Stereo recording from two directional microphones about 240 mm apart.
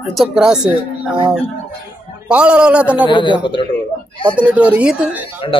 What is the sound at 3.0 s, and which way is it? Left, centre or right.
Speech, centre.